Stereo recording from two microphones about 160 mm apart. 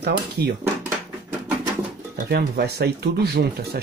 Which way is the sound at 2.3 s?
85° right.